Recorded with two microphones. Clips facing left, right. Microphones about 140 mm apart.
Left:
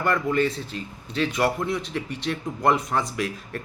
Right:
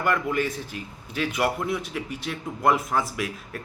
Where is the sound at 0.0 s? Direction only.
10° right (ahead or behind).